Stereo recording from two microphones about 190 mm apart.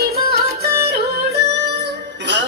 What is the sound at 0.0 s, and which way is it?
Music, 55° right (ahead or behind).